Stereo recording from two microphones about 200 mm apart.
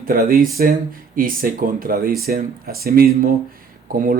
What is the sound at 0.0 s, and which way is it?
Speech, 45° right (ahead or behind).